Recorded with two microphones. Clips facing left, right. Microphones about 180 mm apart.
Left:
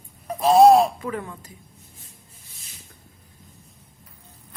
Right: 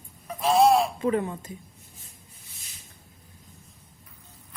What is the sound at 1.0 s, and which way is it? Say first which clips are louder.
Speech: right 5 dB; 25° right (ahead or behind).